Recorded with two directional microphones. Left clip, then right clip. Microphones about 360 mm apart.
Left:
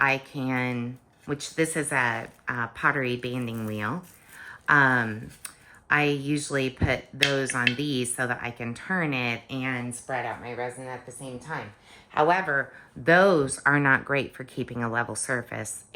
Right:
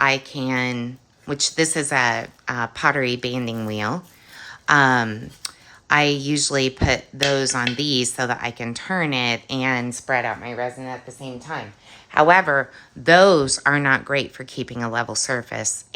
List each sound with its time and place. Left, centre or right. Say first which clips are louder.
0.0 s speech: right 5 dB; centre
10.2 s speech: right 6 dB; right
10.6 s speech: right 6 dB; right
13.1 s speech: right 6 dB; centre